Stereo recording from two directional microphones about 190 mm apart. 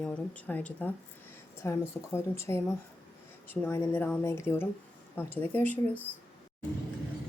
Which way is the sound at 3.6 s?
10° left (ahead or behind).